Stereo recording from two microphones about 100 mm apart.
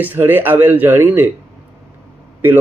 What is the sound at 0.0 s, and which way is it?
Speech, 20° right (ahead or behind).